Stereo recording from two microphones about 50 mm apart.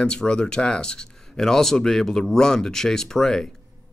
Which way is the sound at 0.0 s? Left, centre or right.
Centre.